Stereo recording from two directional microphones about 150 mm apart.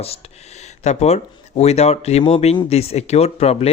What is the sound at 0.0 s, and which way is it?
A man's voice, 45° left (ahead or behind).